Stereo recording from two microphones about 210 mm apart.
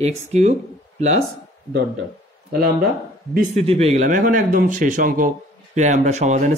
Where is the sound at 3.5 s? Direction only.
30° right (ahead or behind).